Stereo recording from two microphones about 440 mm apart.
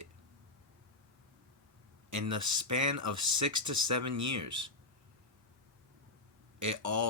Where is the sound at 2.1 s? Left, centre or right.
Right.